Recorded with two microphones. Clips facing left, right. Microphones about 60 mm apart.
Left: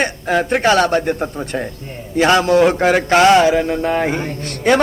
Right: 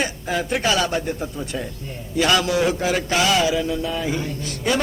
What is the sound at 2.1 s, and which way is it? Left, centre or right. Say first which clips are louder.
Mantra: left 7 dB; left.